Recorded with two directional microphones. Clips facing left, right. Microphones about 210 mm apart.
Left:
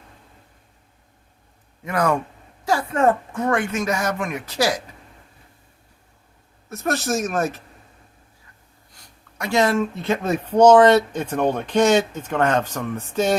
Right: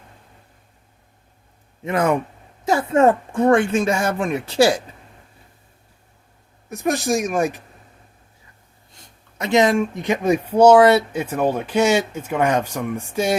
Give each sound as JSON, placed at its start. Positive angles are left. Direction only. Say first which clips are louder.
{"t": 1.8, "sound": "speech", "louder": "right 2 dB", "side_deg": -25}
{"t": 6.7, "sound": "speech", "louder": "right 3 dB", "side_deg": -15}
{"t": 9.4, "sound": "speech", "louder": "right 3 dB", "side_deg": -20}